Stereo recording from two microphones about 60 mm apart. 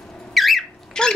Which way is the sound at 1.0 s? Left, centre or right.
Centre.